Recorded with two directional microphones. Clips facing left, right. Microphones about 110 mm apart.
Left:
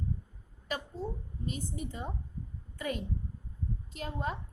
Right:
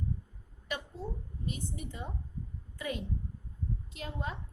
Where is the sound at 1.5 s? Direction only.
40° left (ahead or behind).